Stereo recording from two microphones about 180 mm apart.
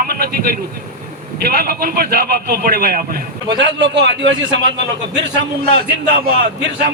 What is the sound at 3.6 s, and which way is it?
A man's voice, 85° right.